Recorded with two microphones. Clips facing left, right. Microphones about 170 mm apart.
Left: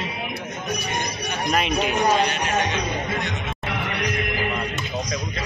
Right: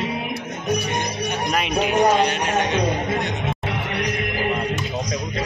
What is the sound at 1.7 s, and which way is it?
Speech, 60° right (ahead or behind).